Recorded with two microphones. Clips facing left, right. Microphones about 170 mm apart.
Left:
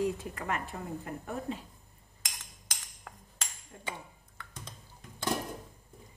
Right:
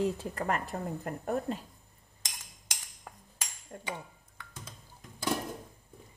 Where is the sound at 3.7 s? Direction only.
50° right (ahead or behind).